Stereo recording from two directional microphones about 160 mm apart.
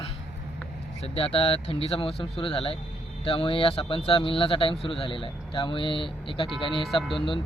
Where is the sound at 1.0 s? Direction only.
35° left (ahead or behind).